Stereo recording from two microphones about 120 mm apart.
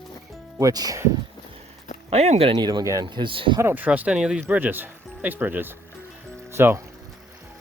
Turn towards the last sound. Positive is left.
turn(degrees=-20)  # may be behind; listen again after turning